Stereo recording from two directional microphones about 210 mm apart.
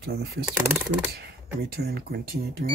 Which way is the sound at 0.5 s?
10° right (ahead or behind).